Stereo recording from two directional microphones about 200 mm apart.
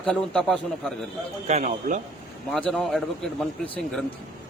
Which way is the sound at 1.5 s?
35° right (ahead or behind).